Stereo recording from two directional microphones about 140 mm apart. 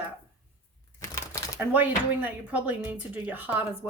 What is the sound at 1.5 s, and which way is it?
Speech, 10° right (ahead or behind).